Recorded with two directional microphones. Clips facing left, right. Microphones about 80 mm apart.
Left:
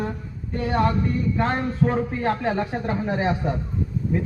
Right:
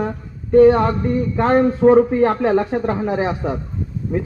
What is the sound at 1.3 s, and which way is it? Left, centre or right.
Speech, right.